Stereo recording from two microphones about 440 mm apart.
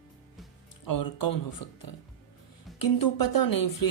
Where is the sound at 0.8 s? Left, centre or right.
Left.